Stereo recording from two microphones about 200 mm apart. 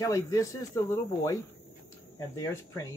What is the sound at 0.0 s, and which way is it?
Speech, 15° left (ahead or behind).